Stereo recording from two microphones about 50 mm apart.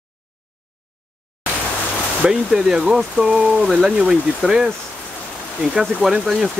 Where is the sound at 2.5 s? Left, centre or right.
Centre.